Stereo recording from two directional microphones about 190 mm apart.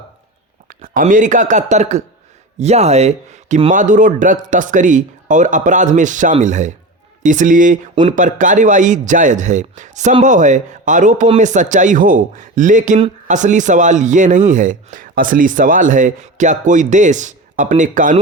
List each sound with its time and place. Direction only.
0.7 s a man's voice: 45° right (ahead or behind)